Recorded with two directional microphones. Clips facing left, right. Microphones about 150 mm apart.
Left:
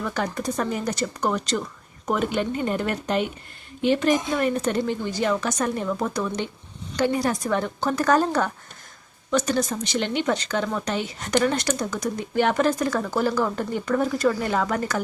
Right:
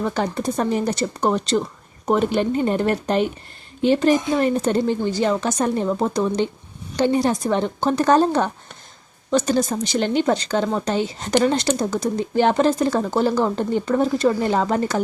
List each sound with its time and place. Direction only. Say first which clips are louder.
0.0 s speech: right 4 dB; 30° right (ahead or behind)